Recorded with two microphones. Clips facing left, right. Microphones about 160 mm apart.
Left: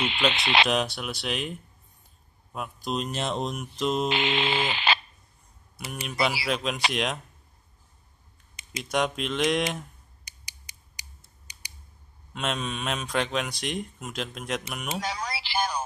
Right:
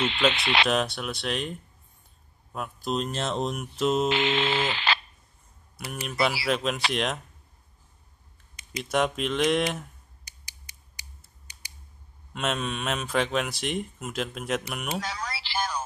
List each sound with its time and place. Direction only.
0.0 s speech: 15° left (ahead or behind)
0.7 s speech: centre (ahead or behind)
4.1 s speech: 15° left (ahead or behind)
5.9 s speech: centre (ahead or behind)
8.7 s speech: centre (ahead or behind)
10.2 s mechanisms: 15° left (ahead or behind)
12.4 s speech: centre (ahead or behind)
14.9 s a sound: 15° left (ahead or behind)